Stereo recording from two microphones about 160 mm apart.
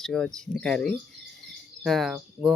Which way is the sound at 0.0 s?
5° left (ahead or behind).